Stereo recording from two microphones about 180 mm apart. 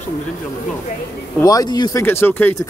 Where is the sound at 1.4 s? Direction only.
20° left (ahead or behind).